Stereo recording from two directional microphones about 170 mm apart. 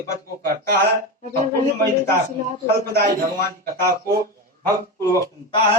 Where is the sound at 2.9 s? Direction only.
50° right (ahead or behind).